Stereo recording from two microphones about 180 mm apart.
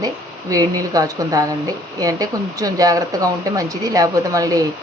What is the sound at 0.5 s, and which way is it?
Speech, 20° right (ahead or behind).